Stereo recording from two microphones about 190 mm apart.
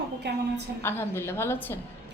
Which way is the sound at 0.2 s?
60° right (ahead or behind).